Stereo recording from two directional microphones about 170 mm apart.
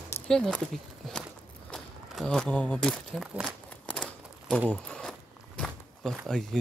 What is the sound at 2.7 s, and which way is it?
Speech, 5° left (ahead or behind).